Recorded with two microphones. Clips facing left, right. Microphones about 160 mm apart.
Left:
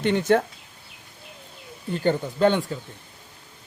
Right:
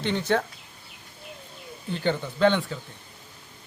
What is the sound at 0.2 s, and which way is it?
Speech, 45° left (ahead or behind).